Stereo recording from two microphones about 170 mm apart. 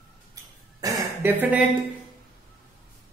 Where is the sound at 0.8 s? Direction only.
15° right (ahead or behind).